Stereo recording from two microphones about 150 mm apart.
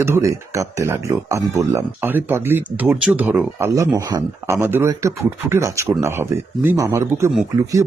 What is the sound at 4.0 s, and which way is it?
Speech, 25° right (ahead or behind).